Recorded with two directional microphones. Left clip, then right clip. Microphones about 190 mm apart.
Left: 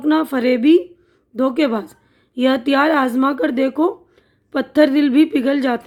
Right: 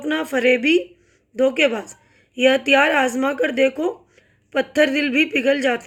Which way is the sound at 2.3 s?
50° left (ahead or behind).